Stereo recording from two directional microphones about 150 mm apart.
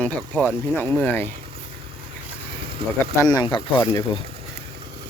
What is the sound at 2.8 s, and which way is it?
Speech, 35° right (ahead or behind).